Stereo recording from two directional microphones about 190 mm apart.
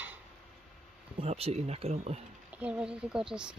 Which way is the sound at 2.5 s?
5° right (ahead or behind).